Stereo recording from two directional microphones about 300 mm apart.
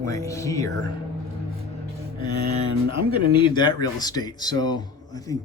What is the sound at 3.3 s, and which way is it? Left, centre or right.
Speech, centre.